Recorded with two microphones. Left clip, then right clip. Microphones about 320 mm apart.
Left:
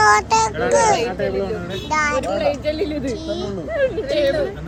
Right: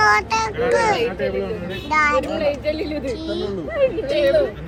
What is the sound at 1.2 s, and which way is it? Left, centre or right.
Speech, left.